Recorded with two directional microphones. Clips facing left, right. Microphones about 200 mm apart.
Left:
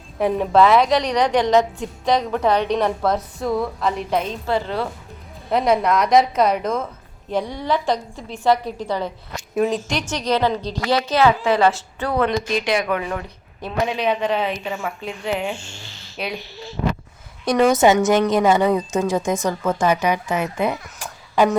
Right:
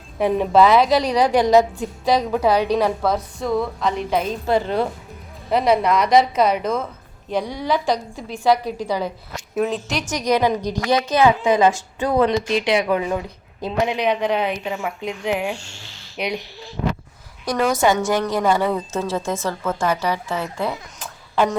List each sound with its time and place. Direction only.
0.2 s a woman's voice: centre (ahead or behind)
4.4 s a woman's voice: 15° right (ahead or behind)
5.5 s a woman's voice: centre (ahead or behind)
7.7 s a woman's voice: 15° right (ahead or behind)
9.6 s a woman's voice: centre (ahead or behind)
15.4 s a woman's voice: centre (ahead or behind)
16.1 s speech: 15° right (ahead or behind)
17.4 s a woman's voice: 20° left (ahead or behind)